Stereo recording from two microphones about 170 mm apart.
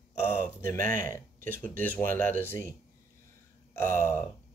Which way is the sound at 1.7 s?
10° left (ahead or behind).